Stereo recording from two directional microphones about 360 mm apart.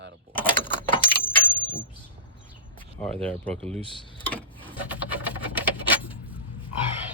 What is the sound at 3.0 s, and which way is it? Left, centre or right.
Speech, centre.